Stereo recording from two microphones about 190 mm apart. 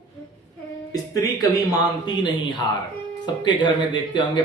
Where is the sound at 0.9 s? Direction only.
20° left (ahead or behind).